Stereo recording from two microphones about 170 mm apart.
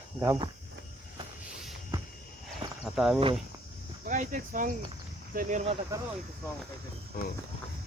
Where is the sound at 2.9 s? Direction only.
Centre (ahead or behind).